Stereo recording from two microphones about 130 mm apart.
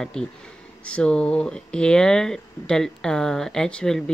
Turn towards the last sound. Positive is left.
turn(degrees=5)  # may be behind; listen again after turning